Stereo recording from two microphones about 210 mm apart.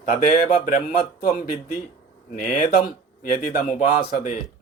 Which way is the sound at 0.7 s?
45° left (ahead or behind).